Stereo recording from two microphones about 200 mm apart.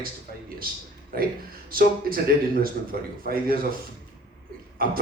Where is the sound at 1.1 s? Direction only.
45° right (ahead or behind).